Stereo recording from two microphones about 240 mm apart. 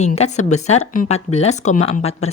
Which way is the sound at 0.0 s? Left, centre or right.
Left.